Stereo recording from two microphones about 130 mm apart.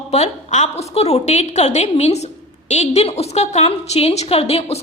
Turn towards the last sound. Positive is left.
turn(degrees=55)  # may be behind; listen again after turning